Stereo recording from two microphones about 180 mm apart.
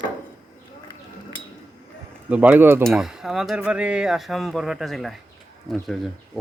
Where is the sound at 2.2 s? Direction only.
10° right (ahead or behind).